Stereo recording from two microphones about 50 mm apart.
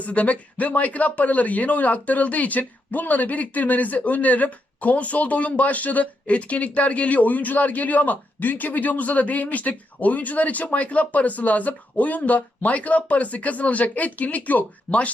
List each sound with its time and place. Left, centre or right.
0.0 s speech: left